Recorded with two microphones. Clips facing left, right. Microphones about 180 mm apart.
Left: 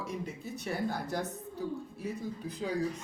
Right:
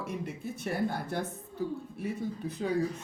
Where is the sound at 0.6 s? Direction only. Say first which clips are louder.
Right 2 dB; 55° right (ahead or behind).